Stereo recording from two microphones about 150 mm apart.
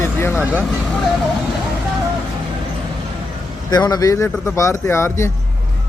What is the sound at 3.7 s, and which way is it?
Speech, 25° left (ahead or behind).